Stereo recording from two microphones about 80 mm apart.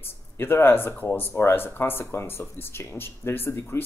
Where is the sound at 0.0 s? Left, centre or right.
Left.